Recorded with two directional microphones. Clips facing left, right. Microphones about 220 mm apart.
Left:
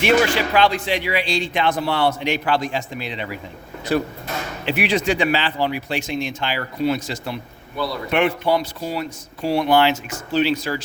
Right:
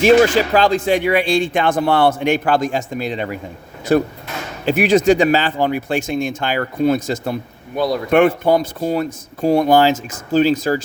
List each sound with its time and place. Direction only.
0.0 s speech: 40° right (ahead or behind)